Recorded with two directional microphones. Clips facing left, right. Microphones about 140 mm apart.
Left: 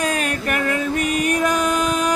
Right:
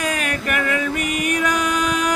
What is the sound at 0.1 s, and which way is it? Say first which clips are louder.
Music: left 1 dB; 35° left (ahead or behind).